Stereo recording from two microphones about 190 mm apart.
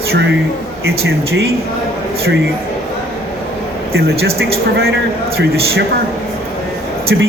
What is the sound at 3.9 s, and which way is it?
Speech, 55° right (ahead or behind).